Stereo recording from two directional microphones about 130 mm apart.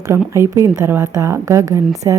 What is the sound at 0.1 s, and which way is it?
A woman's voice, 20° right (ahead or behind).